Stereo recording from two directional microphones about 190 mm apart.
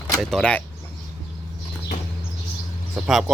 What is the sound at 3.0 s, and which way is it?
Speech, 5° right (ahead or behind).